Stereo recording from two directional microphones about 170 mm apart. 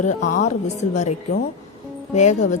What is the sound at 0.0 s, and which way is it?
A woman's voice, 45° left (ahead or behind).